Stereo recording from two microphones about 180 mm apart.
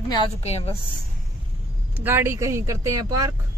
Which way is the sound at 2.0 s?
10° right (ahead or behind).